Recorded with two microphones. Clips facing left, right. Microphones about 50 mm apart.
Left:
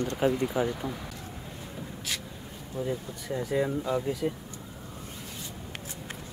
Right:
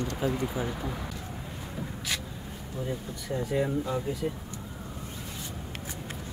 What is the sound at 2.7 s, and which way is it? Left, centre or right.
Speech, centre.